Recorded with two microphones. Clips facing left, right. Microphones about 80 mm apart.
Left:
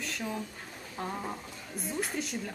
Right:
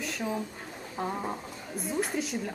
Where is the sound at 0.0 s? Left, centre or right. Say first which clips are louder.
Right 4 dB; centre.